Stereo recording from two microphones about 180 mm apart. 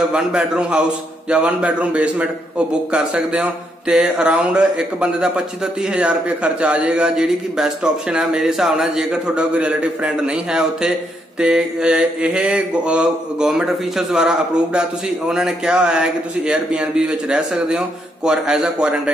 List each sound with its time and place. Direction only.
0.1 s a man's voice: 5° right (ahead or behind)